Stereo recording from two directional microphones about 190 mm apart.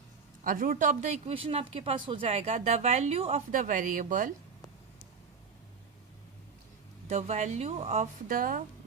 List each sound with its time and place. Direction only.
0.4 s speech: 45° right (ahead or behind)
7.1 s speech: 35° right (ahead or behind)
8.3 s speech: 45° right (ahead or behind)